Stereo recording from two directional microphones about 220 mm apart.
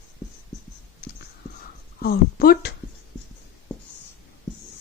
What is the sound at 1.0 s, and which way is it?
Whispering, 50° left (ahead or behind).